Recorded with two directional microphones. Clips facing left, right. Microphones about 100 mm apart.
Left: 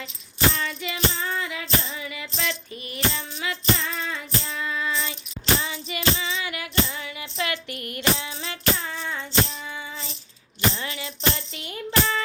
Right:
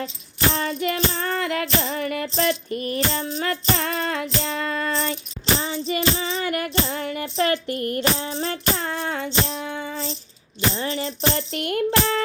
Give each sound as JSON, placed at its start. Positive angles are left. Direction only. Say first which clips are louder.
{"t": 0.5, "sound": "music", "louder": "right 7 dB", "side_deg": -40}
{"t": 5.5, "sound": "music", "louder": "right 6 dB", "side_deg": -35}
{"t": 10.8, "sound": "music", "louder": "right 7 dB", "side_deg": -35}
{"t": 11.3, "sound": "a sound", "louder": "right 11 dB", "side_deg": -60}